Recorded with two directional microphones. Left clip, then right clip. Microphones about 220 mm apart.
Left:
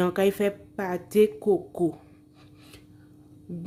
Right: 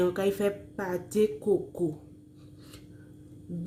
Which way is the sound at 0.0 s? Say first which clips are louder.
Left 3 dB; 35° left (ahead or behind).